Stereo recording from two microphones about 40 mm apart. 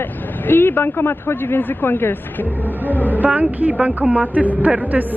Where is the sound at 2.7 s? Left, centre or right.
Left.